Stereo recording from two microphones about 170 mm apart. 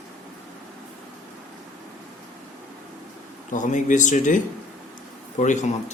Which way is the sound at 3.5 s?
50° left (ahead or behind).